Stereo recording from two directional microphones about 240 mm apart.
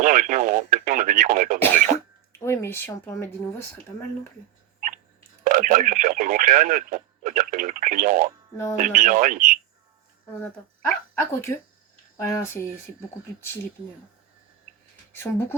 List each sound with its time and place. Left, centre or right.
0.0 s speech: right
1.5 s throat clearing: centre
2.4 s speech: centre
5.5 s speech: right
10.4 s speech: centre
15.1 s speech: centre